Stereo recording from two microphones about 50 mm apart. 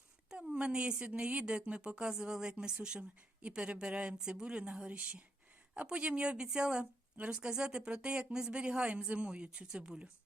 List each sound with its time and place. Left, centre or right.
0.3 s a woman's voice: centre